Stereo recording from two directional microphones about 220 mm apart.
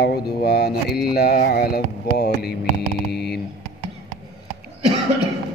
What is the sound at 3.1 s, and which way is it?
Mantra, 45° left (ahead or behind).